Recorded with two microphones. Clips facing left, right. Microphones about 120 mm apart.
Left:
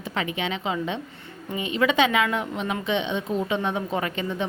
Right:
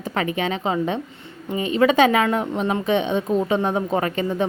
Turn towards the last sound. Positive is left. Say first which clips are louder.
# right 5 dB
turn(degrees=-40)  # may be behind; listen again after turning